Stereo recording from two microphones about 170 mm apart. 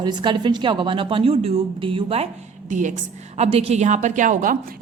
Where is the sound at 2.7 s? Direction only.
50° right (ahead or behind).